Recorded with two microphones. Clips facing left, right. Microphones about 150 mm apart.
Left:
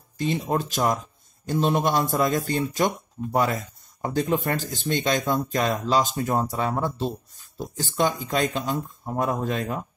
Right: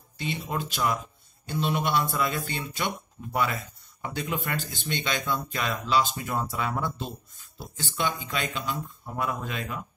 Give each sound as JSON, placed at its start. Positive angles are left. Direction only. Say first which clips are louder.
{"t": 0.2, "sound": "speech", "louder": "left 7 dB", "side_deg": 45}